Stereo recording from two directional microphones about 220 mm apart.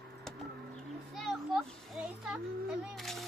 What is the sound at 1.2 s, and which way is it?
A child's voice, centre (ahead or behind).